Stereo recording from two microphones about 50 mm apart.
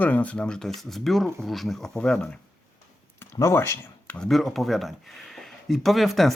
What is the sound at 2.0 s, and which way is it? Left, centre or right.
Speech, centre.